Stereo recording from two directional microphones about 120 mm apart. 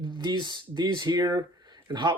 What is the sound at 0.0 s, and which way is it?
Speech, 40° right (ahead or behind).